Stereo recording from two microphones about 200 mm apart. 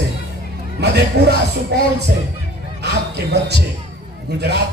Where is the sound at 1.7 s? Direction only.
55° right (ahead or behind).